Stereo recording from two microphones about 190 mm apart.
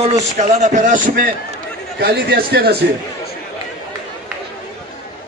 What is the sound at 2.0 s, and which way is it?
Speech, 55° right (ahead or behind).